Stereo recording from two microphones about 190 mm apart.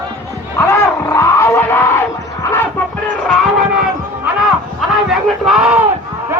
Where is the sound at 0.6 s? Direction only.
15° left (ahead or behind).